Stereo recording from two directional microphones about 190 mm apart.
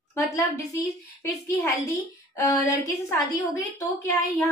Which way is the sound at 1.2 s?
15° left (ahead or behind).